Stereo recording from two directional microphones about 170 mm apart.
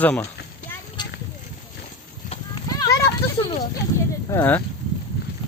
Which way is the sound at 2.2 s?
40° left (ahead or behind).